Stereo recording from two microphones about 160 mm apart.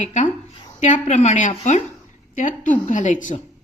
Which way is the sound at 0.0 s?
50° left (ahead or behind).